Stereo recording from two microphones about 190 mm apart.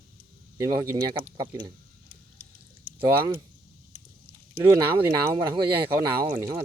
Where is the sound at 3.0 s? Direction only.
25° right (ahead or behind).